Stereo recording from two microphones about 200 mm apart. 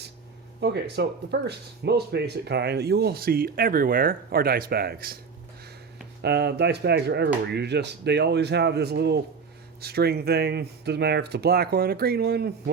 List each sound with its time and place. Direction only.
0.6 s speech: 55° right (ahead or behind)
6.2 s a man's voice: 55° right (ahead or behind)